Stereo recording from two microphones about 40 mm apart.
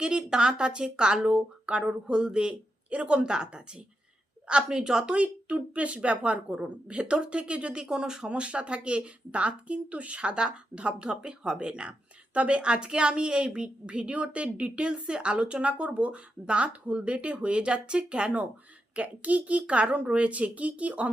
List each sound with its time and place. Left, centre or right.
0.0 s a woman's voice: right
5.1 s a woman's voice: right; by 8.3 s centre
8.3 s a woman's voice: right